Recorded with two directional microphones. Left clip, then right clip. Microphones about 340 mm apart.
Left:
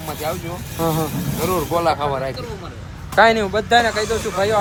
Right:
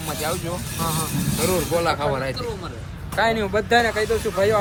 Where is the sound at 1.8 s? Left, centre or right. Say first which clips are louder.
Left 3 dB; centre.